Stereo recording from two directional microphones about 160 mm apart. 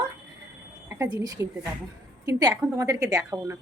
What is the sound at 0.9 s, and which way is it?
A woman's voice, 20° right (ahead or behind).